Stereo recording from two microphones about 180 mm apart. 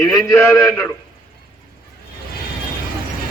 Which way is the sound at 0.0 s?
15° left (ahead or behind).